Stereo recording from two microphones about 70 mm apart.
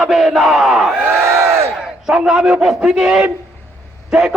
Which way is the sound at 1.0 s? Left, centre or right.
Right.